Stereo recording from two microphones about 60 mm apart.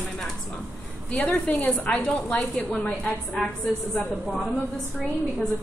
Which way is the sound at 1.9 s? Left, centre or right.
Centre.